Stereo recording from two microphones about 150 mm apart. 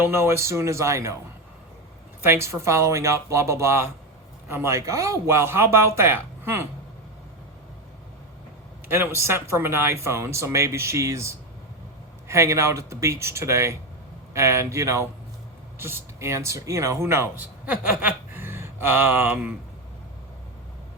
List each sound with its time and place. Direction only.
0.0 s speech: 15° right (ahead or behind)
2.2 s speech: 15° right (ahead or behind)
8.9 s speech: 15° right (ahead or behind)